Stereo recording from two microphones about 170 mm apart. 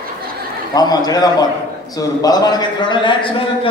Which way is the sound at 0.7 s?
25° left (ahead or behind).